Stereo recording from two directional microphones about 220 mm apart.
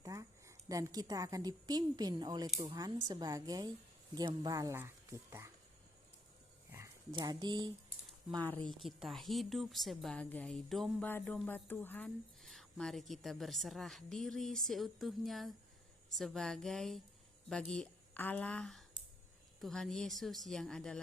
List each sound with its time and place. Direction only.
0.0 s a woman's voice: 15° right (ahead or behind)
6.7 s speech: 15° right (ahead or behind)
8.4 s a woman's voice: 5° left (ahead or behind)